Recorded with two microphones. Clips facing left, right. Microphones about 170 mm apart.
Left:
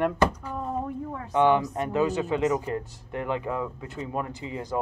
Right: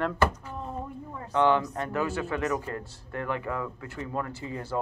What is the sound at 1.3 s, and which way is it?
Speech, 15° left (ahead or behind).